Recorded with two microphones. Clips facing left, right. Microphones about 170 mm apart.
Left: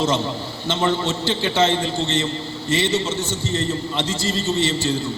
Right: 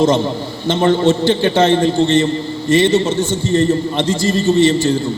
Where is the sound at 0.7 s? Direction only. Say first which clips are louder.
Right 8 dB; 55° right (ahead or behind).